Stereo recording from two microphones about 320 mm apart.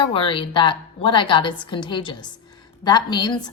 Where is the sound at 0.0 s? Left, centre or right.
Centre.